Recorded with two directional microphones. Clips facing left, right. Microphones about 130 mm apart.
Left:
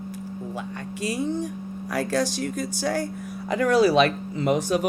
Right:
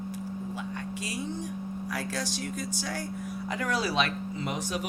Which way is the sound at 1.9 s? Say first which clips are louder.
Left 11 dB; 65° left (ahead or behind).